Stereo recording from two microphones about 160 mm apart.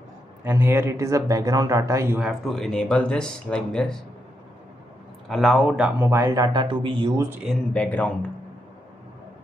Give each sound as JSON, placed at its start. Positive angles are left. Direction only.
{"t": 0.4, "sound": "speech", "side_deg": -15}
{"t": 2.1, "sound": "speech", "side_deg": -5}
{"t": 5.3, "sound": "speech", "side_deg": 0}
{"t": 7.2, "sound": "speech", "side_deg": -15}
{"t": 7.4, "sound": "speech", "side_deg": 10}